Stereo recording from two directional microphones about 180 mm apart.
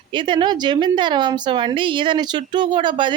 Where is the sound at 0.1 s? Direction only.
25° right (ahead or behind).